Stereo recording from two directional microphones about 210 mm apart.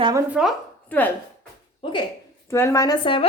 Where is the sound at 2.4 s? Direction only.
15° left (ahead or behind).